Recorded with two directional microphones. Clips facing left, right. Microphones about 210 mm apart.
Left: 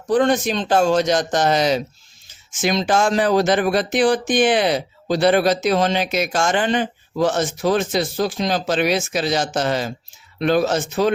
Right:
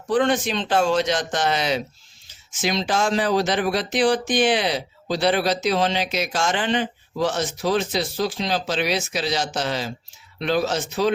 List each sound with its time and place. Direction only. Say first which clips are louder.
0.1 s a man's voice: left 3 dB; 40° left (ahead or behind)